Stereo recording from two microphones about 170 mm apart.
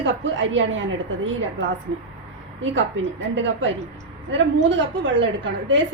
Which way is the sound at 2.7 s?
90° right.